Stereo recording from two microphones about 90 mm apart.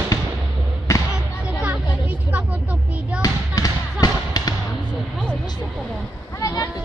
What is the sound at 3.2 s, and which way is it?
Basketball bounce, 45° left (ahead or behind).